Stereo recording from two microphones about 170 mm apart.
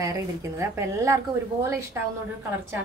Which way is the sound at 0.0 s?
15° right (ahead or behind).